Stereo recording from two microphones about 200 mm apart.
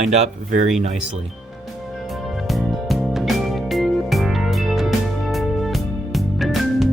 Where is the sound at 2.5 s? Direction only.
Centre (ahead or behind).